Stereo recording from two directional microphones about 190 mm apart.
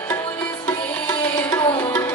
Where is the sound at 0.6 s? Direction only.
10° left (ahead or behind).